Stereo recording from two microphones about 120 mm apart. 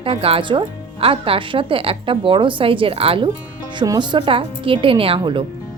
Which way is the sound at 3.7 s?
35° right (ahead or behind).